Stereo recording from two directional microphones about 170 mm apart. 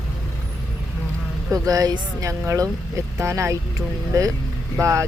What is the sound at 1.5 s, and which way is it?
Speech, 20° right (ahead or behind).